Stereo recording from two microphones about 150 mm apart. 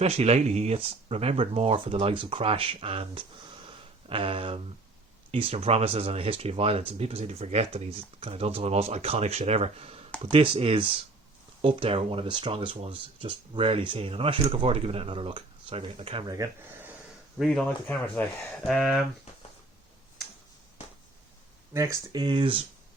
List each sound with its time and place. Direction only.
0.0 s speech: 45° right (ahead or behind)
16.2 s speech: 25° right (ahead or behind)
17.3 s speech: centre (ahead or behind)
21.7 s speech: 20° right (ahead or behind)